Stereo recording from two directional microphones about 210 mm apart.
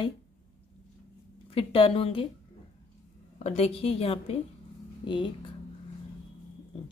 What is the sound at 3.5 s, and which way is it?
A woman's voice, 30° left (ahead or behind).